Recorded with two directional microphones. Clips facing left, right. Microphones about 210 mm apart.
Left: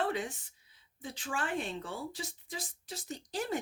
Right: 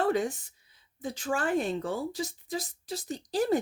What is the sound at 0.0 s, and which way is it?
Speech, 40° right (ahead or behind).